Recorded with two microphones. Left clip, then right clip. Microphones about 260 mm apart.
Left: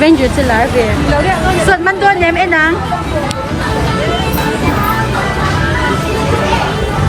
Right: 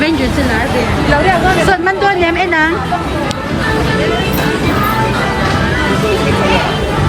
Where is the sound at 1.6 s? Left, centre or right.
Centre.